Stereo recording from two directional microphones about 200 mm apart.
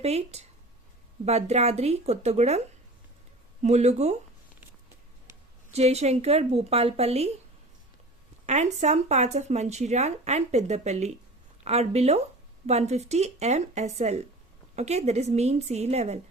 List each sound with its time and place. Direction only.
0.0 s speech: 30° right (ahead or behind)
5.7 s speech: 30° right (ahead or behind)
8.4 s speech: 35° right (ahead or behind)